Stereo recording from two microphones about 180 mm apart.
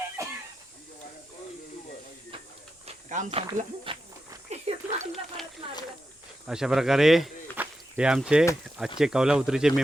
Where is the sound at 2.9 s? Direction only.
45° right (ahead or behind).